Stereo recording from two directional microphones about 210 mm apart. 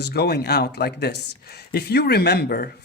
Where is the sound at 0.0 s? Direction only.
50° left (ahead or behind).